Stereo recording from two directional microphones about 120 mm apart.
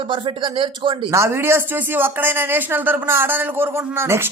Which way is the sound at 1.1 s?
20° right (ahead or behind).